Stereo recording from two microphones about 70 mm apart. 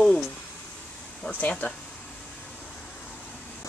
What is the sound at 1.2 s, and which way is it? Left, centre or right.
Speech, left.